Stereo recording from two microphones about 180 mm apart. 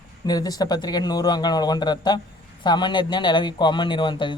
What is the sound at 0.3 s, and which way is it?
A man's voice, 20° left (ahead or behind).